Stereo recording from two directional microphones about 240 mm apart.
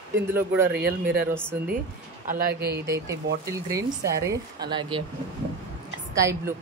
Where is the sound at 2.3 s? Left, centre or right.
Right.